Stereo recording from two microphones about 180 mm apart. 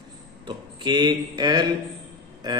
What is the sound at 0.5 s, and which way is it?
Speech, 25° right (ahead or behind).